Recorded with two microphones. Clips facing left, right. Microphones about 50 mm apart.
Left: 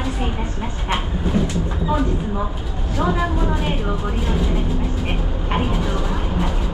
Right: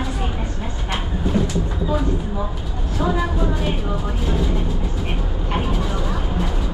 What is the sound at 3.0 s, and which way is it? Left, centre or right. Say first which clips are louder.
Speech: even; centre.